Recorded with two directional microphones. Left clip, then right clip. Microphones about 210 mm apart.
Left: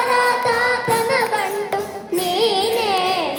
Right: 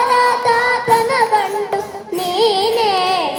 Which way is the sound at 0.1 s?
30° right (ahead or behind).